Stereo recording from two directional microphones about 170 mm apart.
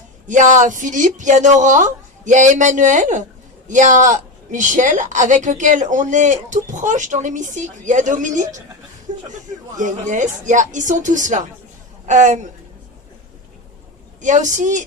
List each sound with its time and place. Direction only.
0.3 s a woman's voice: 45° right (ahead or behind)
9.1 s a sound: 45° right (ahead or behind)
9.7 s a woman's voice: 45° right (ahead or behind)
14.2 s a woman's voice: 45° right (ahead or behind)